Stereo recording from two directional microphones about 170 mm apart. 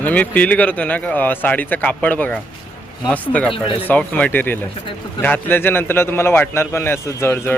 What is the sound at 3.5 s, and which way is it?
Speech, 30° left (ahead or behind).